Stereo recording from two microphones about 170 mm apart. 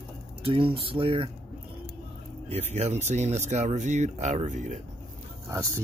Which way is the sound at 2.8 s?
40° right (ahead or behind).